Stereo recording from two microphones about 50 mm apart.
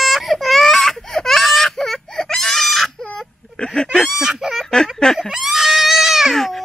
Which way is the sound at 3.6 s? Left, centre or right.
Centre.